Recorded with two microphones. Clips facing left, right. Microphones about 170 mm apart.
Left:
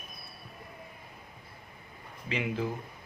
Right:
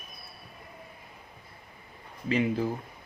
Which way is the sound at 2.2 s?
40° right (ahead or behind).